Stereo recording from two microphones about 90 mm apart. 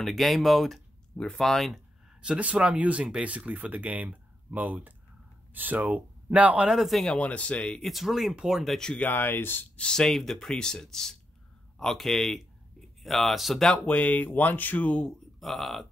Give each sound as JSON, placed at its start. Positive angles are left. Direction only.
{"t": 0.0, "sound": "speech", "side_deg": 0}
{"t": 2.2, "sound": "speech", "side_deg": -15}
{"t": 7.2, "sound": "speech", "side_deg": 15}
{"t": 7.9, "sound": "speech", "side_deg": 0}
{"t": 8.7, "sound": "speech", "side_deg": 5}
{"t": 9.0, "sound": "speech", "side_deg": 25}
{"t": 9.8, "sound": "speech", "side_deg": 10}
{"t": 13.8, "sound": "speech", "side_deg": 15}
{"t": 15.4, "sound": "speech", "side_deg": 0}